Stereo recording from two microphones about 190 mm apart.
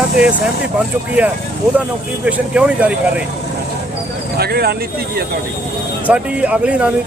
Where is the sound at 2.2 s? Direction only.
5° right (ahead or behind).